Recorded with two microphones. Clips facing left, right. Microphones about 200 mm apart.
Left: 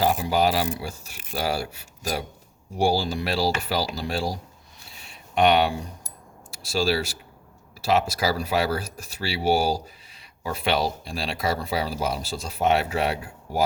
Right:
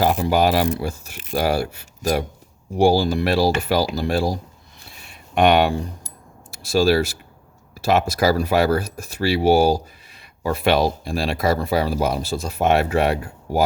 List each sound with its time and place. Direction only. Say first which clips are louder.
0.0 s speech: right 4 dB; 60° right (ahead or behind)